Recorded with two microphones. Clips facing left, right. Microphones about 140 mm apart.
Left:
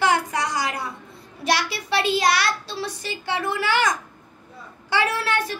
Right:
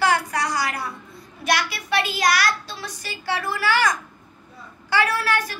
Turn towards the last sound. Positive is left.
turn(degrees=25)  # may be behind; listen again after turning